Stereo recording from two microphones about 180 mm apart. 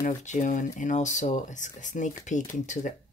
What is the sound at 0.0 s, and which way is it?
Speech, 40° left (ahead or behind).